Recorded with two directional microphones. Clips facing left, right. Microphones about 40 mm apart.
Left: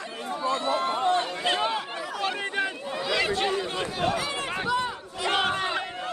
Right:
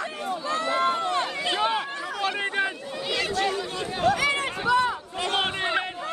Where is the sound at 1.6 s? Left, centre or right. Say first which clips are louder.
Right 2 dB; centre.